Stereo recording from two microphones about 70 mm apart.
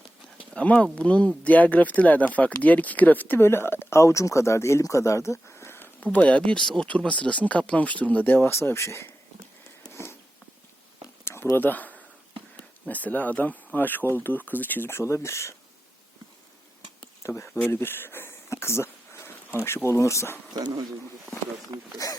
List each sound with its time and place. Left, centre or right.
0.5 s speech: centre
6.1 s speech: centre
8.4 s speech: left
9.9 s a sound: left
11.5 s speech: left
17.2 s speech: left
17.7 s a sound: left
19.6 s speech: left
20.5 s speech: right
21.9 s speech: left